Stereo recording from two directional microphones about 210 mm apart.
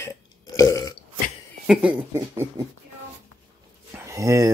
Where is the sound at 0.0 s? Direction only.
15° left (ahead or behind).